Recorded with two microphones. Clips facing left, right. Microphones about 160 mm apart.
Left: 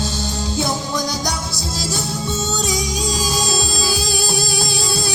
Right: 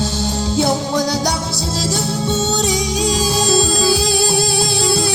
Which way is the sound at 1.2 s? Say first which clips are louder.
Right 5 dB; 30° right (ahead or behind).